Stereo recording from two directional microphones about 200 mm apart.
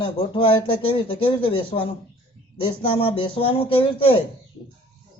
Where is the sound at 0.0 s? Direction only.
25° left (ahead or behind).